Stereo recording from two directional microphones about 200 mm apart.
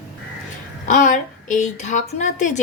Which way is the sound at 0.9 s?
40° left (ahead or behind).